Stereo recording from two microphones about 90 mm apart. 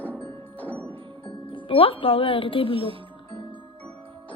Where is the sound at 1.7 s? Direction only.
85° left.